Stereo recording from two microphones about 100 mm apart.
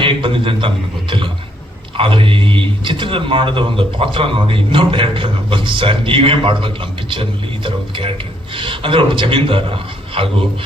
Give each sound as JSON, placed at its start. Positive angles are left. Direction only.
{"t": 0.0, "sound": "speech", "side_deg": -60}
{"t": 2.0, "sound": "speech", "side_deg": -65}